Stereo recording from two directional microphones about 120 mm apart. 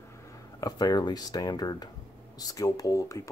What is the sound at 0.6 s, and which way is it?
A man's voice, 35° left (ahead or behind).